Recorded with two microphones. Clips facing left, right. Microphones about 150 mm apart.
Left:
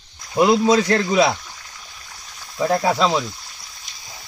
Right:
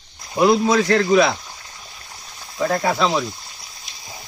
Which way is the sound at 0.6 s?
15° left (ahead or behind).